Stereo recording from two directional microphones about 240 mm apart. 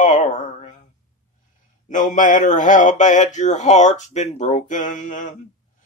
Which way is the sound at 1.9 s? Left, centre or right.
Left.